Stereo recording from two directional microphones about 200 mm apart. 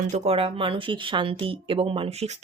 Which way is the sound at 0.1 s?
30° right (ahead or behind).